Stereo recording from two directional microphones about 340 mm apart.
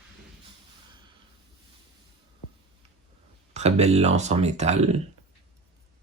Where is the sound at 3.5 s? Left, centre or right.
Centre.